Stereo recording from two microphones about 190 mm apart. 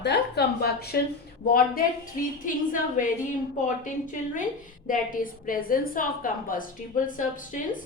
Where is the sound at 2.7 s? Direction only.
45° left (ahead or behind).